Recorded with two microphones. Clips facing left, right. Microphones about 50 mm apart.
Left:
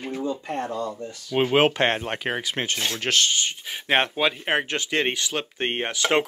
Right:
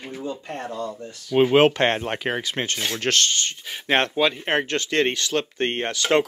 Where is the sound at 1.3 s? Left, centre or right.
Centre.